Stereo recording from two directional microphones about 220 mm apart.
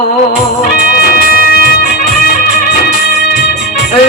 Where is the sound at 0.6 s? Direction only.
40° left (ahead or behind).